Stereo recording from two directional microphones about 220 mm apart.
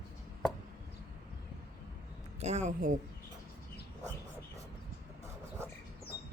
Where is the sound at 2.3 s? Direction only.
30° right (ahead or behind).